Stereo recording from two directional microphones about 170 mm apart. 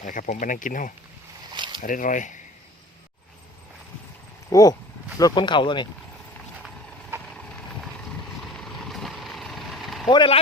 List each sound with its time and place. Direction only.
0.0 s speech: 50° left (ahead or behind)
1.5 s a sound: 25° right (ahead or behind)
1.8 s speech: 50° left (ahead or behind)
4.4 s a sound: 20° left (ahead or behind)
5.2 s speech: 25° left (ahead or behind)
8.6 s vehicle: centre (ahead or behind)
10.1 s speech: 30° left (ahead or behind)